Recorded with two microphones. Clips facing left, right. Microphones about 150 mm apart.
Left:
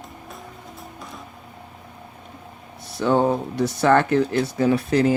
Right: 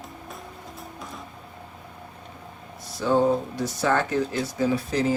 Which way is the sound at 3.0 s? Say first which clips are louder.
Left 2 dB; 65° left (ahead or behind).